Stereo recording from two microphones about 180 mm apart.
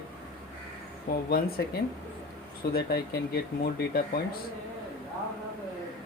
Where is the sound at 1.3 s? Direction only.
60° left (ahead or behind).